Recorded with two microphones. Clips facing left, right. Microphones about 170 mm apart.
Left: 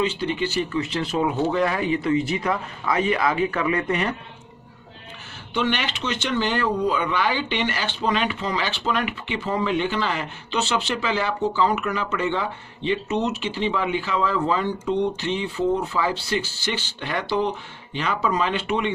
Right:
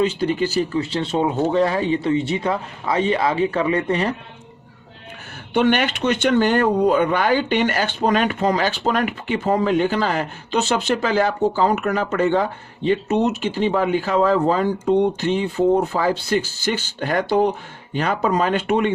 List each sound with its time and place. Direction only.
0.0 s speech: 45° right (ahead or behind)
5.5 s speech: 50° right (ahead or behind)